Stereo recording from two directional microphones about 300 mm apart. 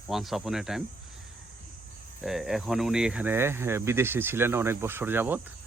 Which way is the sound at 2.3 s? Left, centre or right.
Centre.